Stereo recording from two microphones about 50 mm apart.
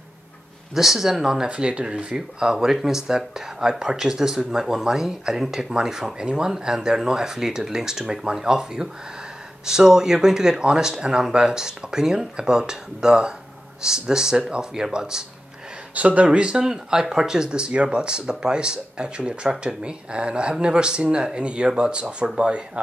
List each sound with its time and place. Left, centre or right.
0.7 s speech: centre
15.9 s speech: right
16.3 s speech: centre